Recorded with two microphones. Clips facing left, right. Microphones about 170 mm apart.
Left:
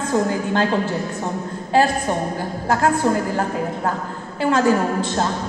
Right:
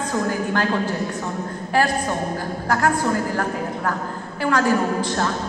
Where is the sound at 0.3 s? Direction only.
20° left (ahead or behind).